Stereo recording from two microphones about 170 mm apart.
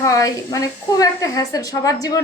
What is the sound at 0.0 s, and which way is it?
Speech, 20° left (ahead or behind).